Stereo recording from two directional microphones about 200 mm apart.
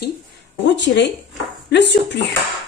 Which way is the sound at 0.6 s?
60° left (ahead or behind).